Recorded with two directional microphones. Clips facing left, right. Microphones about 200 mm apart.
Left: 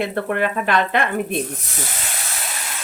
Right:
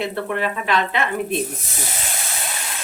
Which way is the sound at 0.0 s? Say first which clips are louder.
Left 2 dB; 50° left (ahead or behind).